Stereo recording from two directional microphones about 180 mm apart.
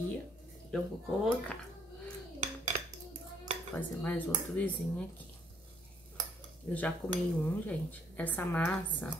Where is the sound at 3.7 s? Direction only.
10° left (ahead or behind).